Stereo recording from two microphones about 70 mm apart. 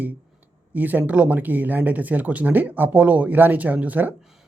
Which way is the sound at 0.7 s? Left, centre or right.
Right.